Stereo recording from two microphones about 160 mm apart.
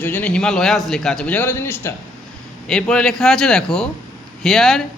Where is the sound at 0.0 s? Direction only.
10° left (ahead or behind).